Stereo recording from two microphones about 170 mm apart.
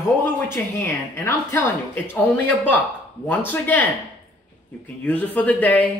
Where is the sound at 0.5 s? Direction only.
15° left (ahead or behind).